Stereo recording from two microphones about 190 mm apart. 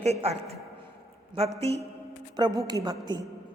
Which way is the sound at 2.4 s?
20° right (ahead or behind).